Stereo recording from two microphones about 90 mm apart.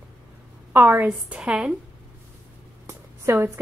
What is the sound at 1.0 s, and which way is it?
Speech, 10° right (ahead or behind).